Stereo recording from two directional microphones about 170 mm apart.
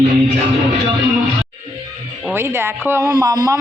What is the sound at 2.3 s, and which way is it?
A woman's voice, 15° right (ahead or behind).